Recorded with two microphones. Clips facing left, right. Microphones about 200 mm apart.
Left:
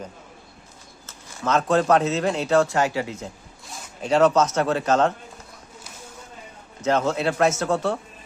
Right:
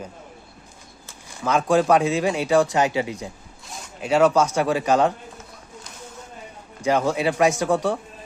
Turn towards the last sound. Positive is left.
turn(degrees=-15)  # may be behind; listen again after turning